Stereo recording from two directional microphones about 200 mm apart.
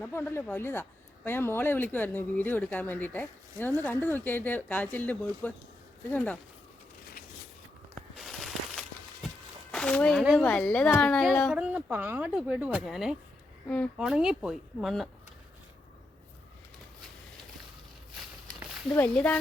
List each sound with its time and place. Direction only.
0.0 s speech: 10° left (ahead or behind)
8.2 s a sound: centre (ahead or behind)
9.7 s speech: 5° left (ahead or behind)
13.9 s speech: 5° right (ahead or behind)
18.9 s speech: 10° left (ahead or behind)